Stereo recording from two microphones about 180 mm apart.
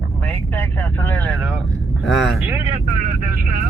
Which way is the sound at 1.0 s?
10° left (ahead or behind).